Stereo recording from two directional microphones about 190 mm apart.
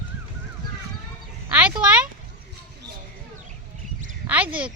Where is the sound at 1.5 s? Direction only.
5° right (ahead or behind).